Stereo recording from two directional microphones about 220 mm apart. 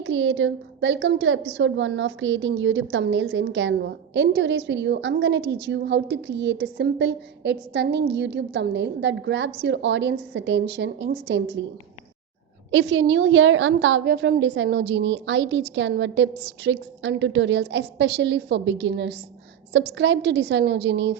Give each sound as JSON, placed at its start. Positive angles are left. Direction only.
{"t": 0.0, "sound": "a woman's voice", "side_deg": -60}
{"t": 12.7, "sound": "a woman's voice", "side_deg": -55}